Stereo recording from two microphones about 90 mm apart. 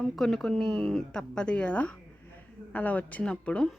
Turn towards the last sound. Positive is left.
turn(degrees=10)  # may be behind; listen again after turning